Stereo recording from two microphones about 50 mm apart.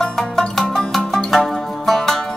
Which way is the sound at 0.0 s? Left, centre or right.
Centre.